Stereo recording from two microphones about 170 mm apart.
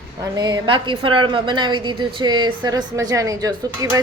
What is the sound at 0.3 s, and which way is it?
A woman's voice, 20° right (ahead or behind).